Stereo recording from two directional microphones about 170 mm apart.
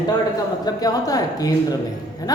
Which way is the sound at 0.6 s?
20° left (ahead or behind).